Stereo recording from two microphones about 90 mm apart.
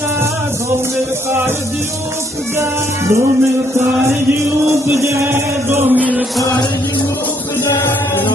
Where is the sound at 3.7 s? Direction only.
30° right (ahead or behind).